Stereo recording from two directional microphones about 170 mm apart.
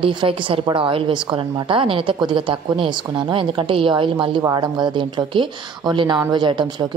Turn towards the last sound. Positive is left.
turn(degrees=-25)  # may be behind; listen again after turning